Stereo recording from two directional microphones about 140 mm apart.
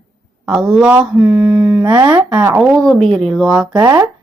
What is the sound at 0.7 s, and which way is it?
Speech, 5° right (ahead or behind).